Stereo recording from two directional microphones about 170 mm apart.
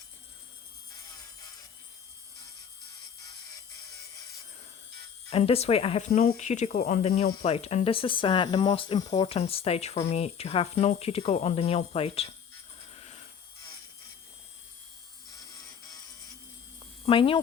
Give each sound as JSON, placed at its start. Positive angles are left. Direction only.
{"t": 5.3, "sound": "speech", "side_deg": 35}
{"t": 17.1, "sound": "speech", "side_deg": 30}